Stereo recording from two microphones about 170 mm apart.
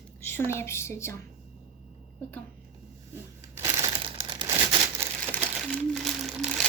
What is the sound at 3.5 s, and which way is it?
Crumpling, 15° right (ahead or behind).